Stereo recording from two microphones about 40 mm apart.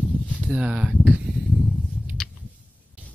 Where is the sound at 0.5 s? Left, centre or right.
Right.